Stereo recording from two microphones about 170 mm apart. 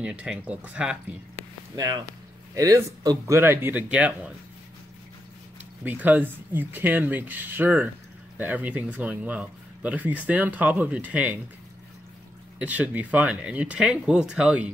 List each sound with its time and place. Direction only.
0.0 s speech: 5° right (ahead or behind)
1.8 s speech: 20° right (ahead or behind)
5.9 s speech: 10° right (ahead or behind)
12.5 s speech: 10° right (ahead or behind)